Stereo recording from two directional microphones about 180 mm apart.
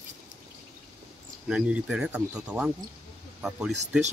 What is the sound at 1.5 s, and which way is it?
Speech, 5° right (ahead or behind).